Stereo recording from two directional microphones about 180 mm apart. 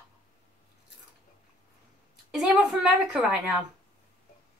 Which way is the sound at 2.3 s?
5° right (ahead or behind).